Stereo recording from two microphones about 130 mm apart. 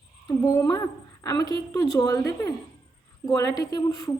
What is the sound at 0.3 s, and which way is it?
A woman's voice, 25° left (ahead or behind).